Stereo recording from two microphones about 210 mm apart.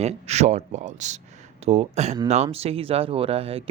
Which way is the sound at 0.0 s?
30° right (ahead or behind).